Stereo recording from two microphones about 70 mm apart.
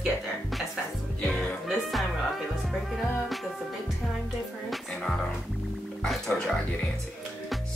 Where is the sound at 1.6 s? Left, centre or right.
Centre.